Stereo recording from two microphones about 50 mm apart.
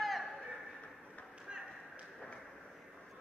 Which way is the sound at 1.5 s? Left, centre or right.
Centre.